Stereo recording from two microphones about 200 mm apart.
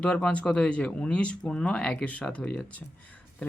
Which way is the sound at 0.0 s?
5° left (ahead or behind).